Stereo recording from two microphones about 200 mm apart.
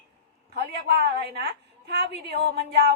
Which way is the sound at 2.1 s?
55° right (ahead or behind).